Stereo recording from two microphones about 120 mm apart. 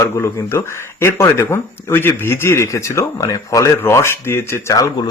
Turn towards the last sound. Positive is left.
turn(degrees=25)  # may be behind; listen again after turning